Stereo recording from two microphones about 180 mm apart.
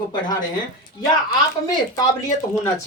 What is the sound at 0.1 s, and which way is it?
Speech, 20° left (ahead or behind).